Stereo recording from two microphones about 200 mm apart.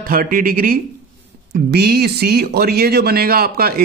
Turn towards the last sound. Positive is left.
turn(degrees=-50)  # may be behind; listen again after turning